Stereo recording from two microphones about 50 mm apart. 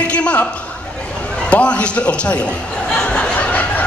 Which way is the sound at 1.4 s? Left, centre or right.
Left.